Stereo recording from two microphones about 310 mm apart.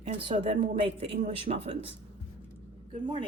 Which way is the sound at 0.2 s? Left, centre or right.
Centre.